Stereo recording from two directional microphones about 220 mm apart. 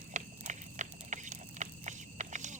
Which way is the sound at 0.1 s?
35° right (ahead or behind).